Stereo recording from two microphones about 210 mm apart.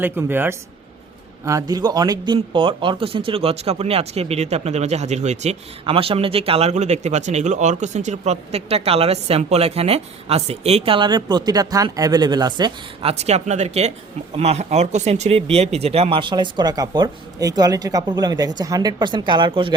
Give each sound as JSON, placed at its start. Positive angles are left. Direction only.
{"t": 0.0, "sound": "speech", "side_deg": -10}